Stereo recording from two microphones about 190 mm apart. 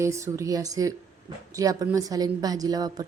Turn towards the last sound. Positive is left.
turn(degrees=-20)  # may be behind; listen again after turning